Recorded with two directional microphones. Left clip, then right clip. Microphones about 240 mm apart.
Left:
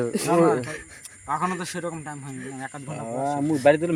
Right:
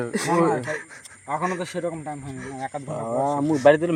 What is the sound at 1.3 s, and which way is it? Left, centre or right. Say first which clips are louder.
Speech: even; left.